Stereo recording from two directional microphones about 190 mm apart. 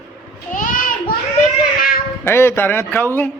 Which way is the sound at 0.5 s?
45° left (ahead or behind).